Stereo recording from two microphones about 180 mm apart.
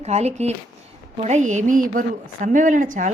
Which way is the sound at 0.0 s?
35° right (ahead or behind).